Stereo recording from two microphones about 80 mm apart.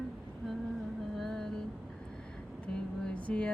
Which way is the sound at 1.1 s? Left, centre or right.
Centre.